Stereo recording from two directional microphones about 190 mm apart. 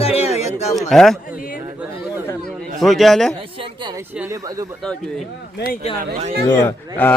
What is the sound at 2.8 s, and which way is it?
Speech, centre (ahead or behind).